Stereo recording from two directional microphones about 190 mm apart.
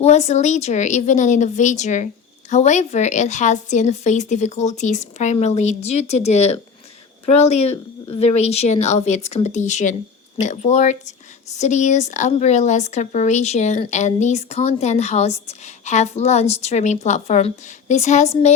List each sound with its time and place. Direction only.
0.0 s a woman's voice: 35° left (ahead or behind)